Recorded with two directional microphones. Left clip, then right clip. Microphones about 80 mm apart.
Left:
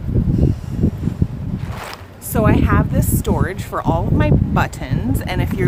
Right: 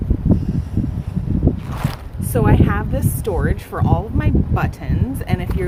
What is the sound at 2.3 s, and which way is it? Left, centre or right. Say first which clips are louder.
Speech: left 2 dB; left.